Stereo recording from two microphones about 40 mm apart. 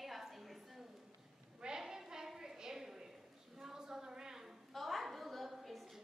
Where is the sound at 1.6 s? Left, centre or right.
Centre.